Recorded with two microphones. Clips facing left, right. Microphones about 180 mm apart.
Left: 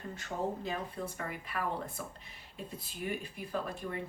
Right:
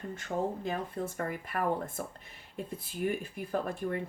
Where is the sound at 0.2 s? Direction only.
50° right (ahead or behind).